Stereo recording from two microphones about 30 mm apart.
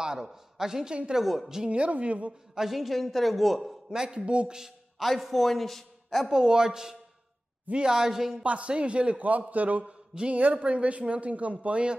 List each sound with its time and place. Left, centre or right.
0.0 s a sound: right
0.3 s speech: centre
1.2 s a woman's voice: centre
1.7 s speech: right
2.7 s a woman's voice: centre
3.9 s a woman's voice: right
4.9 s a man's voice: centre
6.3 s a woman's voice: right
8.5 s speech: right
9.5 s a man's voice: right
9.8 s speech: right
10.3 s speech: right